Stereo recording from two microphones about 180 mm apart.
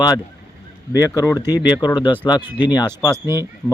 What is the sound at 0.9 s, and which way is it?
Speech, 20° left (ahead or behind).